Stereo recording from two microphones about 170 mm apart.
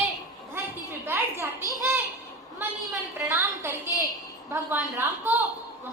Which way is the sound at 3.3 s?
15° right (ahead or behind).